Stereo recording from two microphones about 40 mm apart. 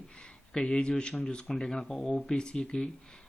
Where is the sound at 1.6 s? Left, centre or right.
Centre.